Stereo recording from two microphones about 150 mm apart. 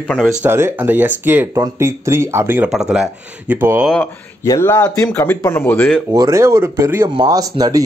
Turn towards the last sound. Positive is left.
turn(degrees=-25)  # may be behind; listen again after turning